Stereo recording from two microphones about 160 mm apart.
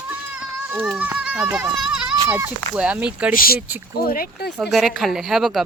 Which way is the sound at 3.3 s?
65° left (ahead or behind).